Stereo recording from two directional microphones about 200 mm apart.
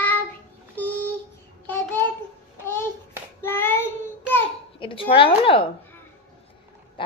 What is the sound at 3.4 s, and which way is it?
Child singing, 10° left (ahead or behind).